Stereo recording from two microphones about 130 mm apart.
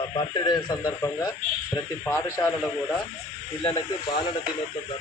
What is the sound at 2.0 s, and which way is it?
Speech, 15° left (ahead or behind).